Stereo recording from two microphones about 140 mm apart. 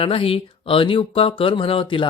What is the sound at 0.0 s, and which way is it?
Speech, 40° left (ahead or behind).